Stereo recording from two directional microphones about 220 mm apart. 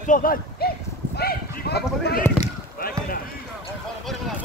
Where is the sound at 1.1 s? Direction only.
45° left (ahead or behind).